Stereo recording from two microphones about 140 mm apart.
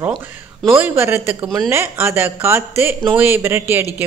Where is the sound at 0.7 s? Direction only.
15° right (ahead or behind).